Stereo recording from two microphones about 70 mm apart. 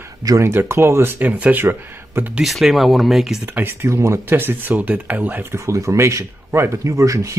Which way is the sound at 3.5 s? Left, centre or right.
Right.